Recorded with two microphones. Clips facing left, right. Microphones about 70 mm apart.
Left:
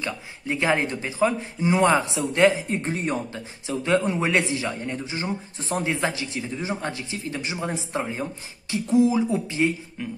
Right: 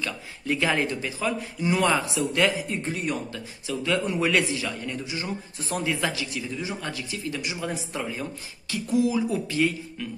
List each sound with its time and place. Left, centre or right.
0.0 s speech: left